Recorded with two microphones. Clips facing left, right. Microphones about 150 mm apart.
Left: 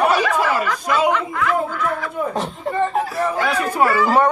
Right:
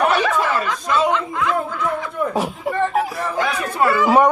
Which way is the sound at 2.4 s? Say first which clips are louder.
Right 1 dB; 10° right (ahead or behind).